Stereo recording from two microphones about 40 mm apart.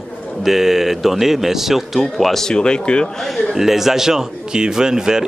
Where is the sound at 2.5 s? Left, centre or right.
Left.